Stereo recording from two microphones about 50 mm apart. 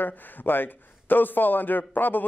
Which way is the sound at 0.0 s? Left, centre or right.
Left.